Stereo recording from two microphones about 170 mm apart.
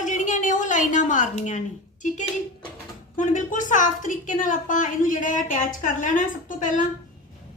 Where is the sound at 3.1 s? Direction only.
50° left (ahead or behind).